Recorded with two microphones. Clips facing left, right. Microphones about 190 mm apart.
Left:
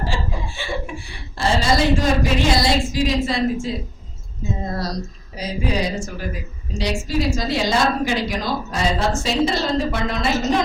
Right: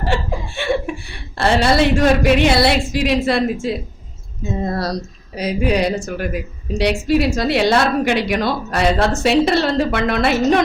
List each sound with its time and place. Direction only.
0.0 s a woman's voice: 65° right (ahead or behind)
5.4 s a woman's voice: 65° right (ahead or behind)